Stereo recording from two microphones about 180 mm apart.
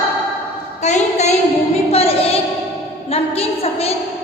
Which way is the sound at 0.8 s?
40° left (ahead or behind).